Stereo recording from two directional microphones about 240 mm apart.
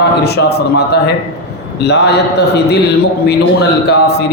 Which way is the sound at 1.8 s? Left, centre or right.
Left.